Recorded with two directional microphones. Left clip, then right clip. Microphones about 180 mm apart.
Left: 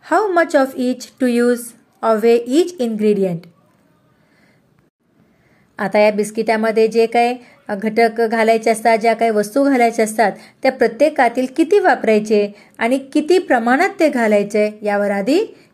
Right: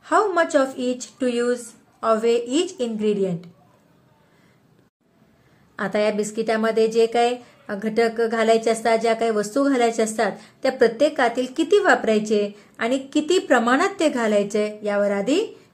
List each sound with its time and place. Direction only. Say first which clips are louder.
0.0 s a woman's voice: left 4 dB; 35° left (ahead or behind)
5.8 s a woman's voice: left 8 dB; 25° left (ahead or behind)